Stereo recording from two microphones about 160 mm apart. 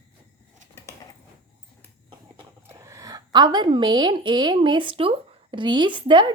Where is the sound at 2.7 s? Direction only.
20° right (ahead or behind).